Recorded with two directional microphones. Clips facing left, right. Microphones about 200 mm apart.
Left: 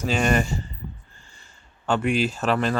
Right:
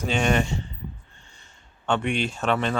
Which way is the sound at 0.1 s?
Centre (ahead or behind).